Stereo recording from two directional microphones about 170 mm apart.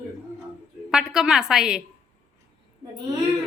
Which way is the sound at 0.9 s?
5° right (ahead or behind).